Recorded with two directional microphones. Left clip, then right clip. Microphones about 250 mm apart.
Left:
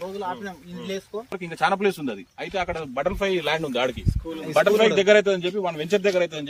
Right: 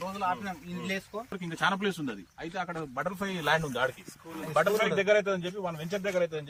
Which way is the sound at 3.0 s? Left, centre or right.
Left.